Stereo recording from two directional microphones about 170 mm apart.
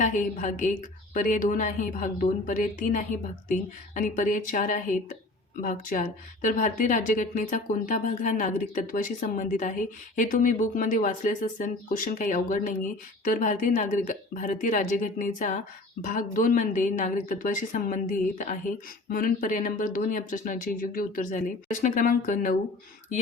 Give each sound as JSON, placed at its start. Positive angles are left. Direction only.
{"t": 0.0, "sound": "speech", "side_deg": 45}